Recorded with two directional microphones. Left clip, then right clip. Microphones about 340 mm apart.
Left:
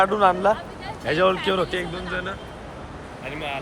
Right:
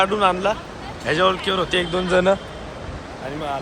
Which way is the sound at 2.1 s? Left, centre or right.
Centre.